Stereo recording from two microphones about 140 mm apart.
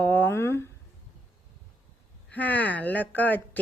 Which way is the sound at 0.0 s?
10° left (ahead or behind).